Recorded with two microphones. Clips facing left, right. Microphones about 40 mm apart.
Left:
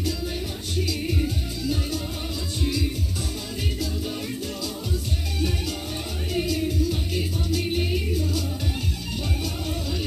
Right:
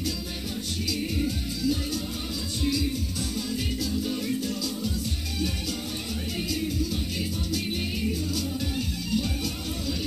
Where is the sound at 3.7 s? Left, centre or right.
Left.